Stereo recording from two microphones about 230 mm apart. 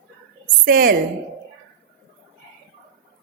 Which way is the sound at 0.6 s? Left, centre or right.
Right.